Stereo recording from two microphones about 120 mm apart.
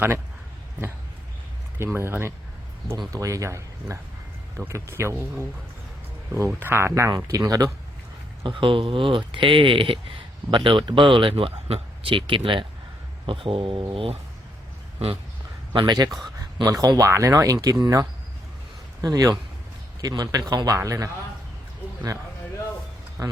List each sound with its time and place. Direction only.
1.8 s speech: 20° right (ahead or behind)
8.4 s speech: 45° right (ahead or behind)
15.7 s a man's voice: 40° right (ahead or behind)
19.0 s a man's voice: 30° right (ahead or behind)
23.2 s speech: 30° right (ahead or behind)